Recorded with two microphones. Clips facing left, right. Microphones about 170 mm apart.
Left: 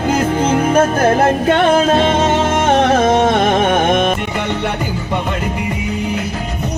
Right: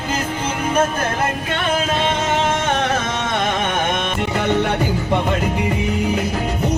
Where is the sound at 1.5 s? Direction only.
50° left (ahead or behind).